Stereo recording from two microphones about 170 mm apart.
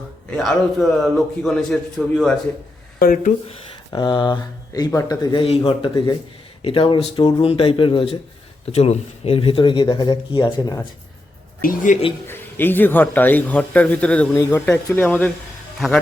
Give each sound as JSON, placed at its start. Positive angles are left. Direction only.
{"t": 0.3, "sound": "a man's voice", "side_deg": 0}
{"t": 3.0, "sound": "speech", "side_deg": 55}
{"t": 3.9, "sound": "speech", "side_deg": 25}
{"t": 5.9, "sound": "speech", "side_deg": 20}
{"t": 6.6, "sound": "speech", "side_deg": 30}
{"t": 11.6, "sound": "speech", "side_deg": 55}
{"t": 12.3, "sound": "speech", "side_deg": 10}